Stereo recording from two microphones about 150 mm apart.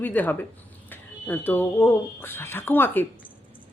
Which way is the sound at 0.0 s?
10° left (ahead or behind).